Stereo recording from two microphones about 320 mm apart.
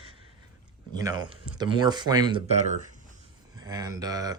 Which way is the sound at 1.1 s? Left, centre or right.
Centre.